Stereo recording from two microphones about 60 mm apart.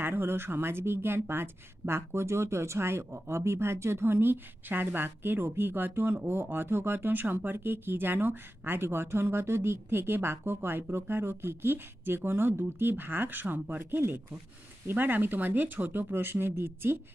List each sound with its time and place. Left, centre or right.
0.0 s speech: right